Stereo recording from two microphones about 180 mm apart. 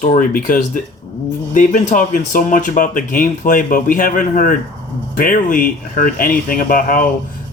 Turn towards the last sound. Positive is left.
turn(degrees=50)  # may be behind; listen again after turning